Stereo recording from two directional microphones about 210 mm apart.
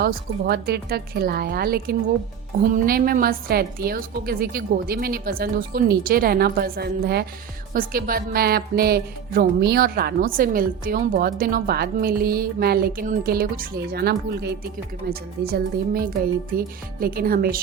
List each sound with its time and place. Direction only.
0.0 s speech: 50° right (ahead or behind)